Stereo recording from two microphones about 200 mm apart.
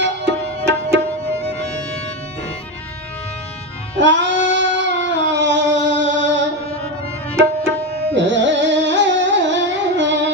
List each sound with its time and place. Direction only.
0.0 s music: 60° right (ahead or behind)
3.9 s female singing: 65° right (ahead or behind)
8.1 s music: 65° right (ahead or behind)